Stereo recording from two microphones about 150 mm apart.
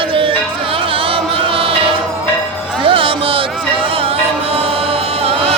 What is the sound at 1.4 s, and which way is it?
Chant, 35° right (ahead or behind).